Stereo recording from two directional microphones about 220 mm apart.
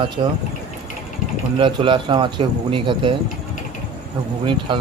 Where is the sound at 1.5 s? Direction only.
20° right (ahead or behind).